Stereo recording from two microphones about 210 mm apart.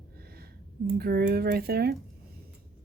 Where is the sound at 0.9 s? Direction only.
45° right (ahead or behind).